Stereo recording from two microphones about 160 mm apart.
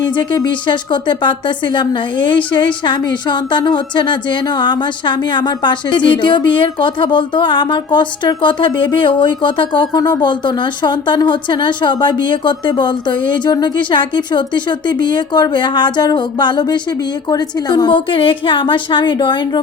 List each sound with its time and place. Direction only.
0.0 s a woman's voice: 25° left (ahead or behind)